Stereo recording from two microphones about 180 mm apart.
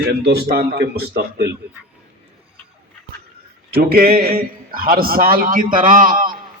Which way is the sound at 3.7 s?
55° right (ahead or behind).